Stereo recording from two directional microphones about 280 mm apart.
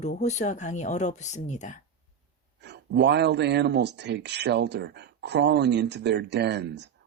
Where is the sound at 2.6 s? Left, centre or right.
Right.